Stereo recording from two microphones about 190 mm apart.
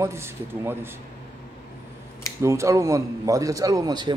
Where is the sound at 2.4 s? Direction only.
15° right (ahead or behind).